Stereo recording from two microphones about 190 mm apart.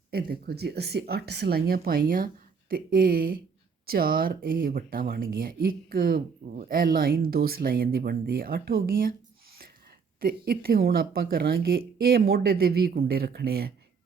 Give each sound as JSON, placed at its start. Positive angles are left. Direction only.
{"t": 0.1, "sound": "speech", "side_deg": -55}
{"t": 10.2, "sound": "speech", "side_deg": -50}